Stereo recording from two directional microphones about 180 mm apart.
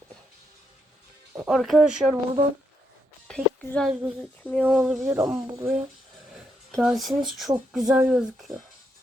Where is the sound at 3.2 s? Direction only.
5° left (ahead or behind).